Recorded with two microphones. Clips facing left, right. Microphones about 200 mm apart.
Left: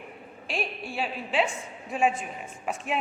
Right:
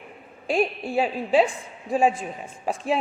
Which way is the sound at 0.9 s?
40° right (ahead or behind).